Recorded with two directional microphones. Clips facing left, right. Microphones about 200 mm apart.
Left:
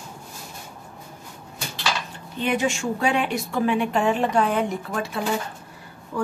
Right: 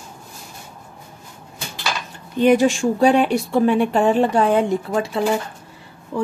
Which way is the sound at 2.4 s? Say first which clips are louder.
Right 9 dB; 40° right (ahead or behind).